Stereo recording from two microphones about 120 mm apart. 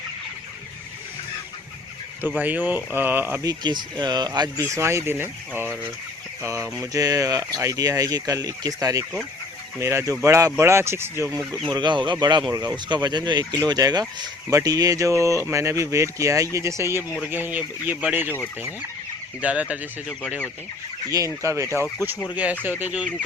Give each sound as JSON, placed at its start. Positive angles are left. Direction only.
{"t": 2.2, "sound": "speech", "side_deg": -15}
{"t": 3.4, "sound": "speech", "side_deg": -35}
{"t": 4.7, "sound": "speech", "side_deg": -25}
{"t": 11.3, "sound": "speech", "side_deg": -5}
{"t": 11.7, "sound": "speech", "side_deg": -40}
{"t": 19.4, "sound": "speech", "side_deg": -10}
{"t": 21.4, "sound": "speech", "side_deg": -25}
{"t": 22.8, "sound": "speech", "side_deg": -10}